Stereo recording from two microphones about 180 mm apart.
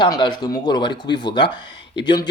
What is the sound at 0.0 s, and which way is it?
Speech, 25° left (ahead or behind).